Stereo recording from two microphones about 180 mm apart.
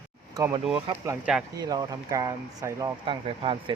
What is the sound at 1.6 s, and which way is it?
Speech, 20° right (ahead or behind).